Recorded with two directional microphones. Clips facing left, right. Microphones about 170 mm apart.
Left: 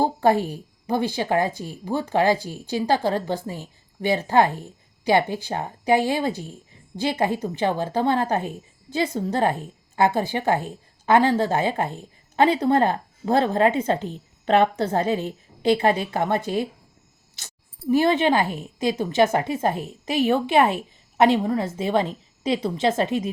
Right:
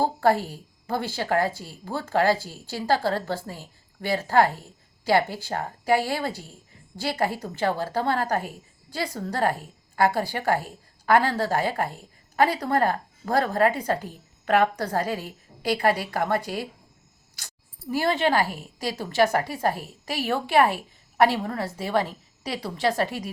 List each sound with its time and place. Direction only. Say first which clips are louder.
0.0 s a woman's voice: left 2 dB; 20° left (ahead or behind)